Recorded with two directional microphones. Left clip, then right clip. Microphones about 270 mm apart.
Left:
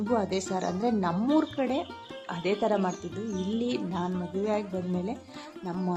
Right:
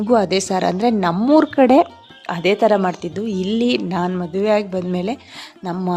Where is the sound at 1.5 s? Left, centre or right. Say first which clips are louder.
Right 17 dB; right.